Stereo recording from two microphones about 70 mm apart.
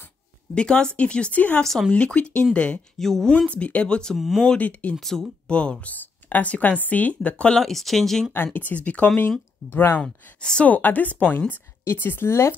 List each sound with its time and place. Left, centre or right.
0.6 s speech: centre
1.6 s speech: centre
1.9 s speech: centre
3.0 s speech: centre
4.2 s speech: centre
4.5 s speech: centre
5.1 s speech: centre
5.5 s speech: centre
7.6 s speech: centre
8.5 s speech: left
9.7 s speech: left
10.0 s speech: centre
10.7 s speech: left